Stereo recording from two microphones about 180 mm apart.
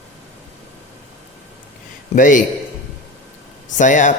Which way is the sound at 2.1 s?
45° left (ahead or behind).